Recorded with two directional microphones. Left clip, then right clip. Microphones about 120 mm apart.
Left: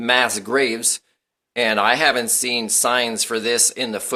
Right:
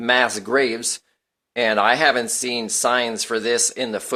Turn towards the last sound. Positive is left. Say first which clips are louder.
# left 1 dB
turn(degrees=-35)  # may be behind; listen again after turning